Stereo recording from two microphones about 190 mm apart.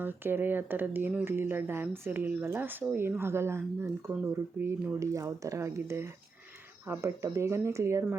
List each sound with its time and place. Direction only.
0.0 s speech: 10° right (ahead or behind)